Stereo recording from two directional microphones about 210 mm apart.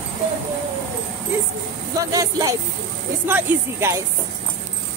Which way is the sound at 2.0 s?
15° right (ahead or behind).